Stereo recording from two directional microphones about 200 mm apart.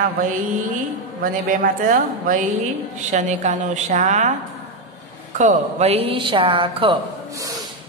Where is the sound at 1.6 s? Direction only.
45° right (ahead or behind).